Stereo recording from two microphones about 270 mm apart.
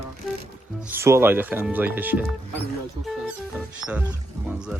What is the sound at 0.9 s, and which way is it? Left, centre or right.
Speech, centre.